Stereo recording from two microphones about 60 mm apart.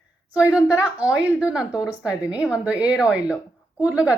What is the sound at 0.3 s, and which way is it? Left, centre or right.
Speech, centre.